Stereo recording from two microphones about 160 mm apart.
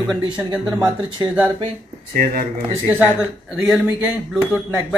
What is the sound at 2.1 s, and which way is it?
Speech, 70° right (ahead or behind).